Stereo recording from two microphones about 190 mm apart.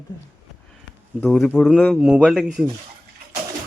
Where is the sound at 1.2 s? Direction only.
Centre (ahead or behind).